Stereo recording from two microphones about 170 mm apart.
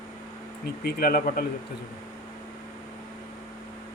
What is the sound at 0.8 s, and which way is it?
Speech, 60° left (ahead or behind).